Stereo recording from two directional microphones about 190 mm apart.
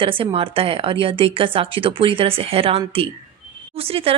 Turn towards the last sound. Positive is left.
turn(degrees=-30)  # may be behind; listen again after turning